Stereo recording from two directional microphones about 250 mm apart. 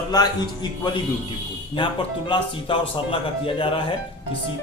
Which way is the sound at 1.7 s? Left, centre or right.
Centre.